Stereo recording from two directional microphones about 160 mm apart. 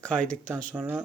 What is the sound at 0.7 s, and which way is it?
Speech, 5° right (ahead or behind).